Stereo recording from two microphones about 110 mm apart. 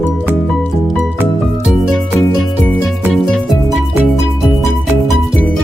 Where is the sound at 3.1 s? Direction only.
Centre (ahead or behind).